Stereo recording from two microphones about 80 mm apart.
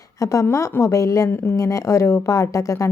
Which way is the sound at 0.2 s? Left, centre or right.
Left.